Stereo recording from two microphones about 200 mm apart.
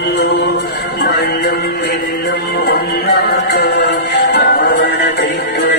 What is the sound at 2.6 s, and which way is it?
Music, 55° left (ahead or behind).